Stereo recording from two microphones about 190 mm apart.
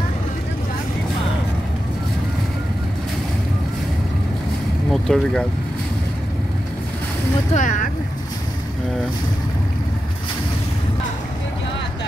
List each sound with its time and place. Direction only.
4.9 s speech: 5° left (ahead or behind)
7.5 s speech: 40° left (ahead or behind)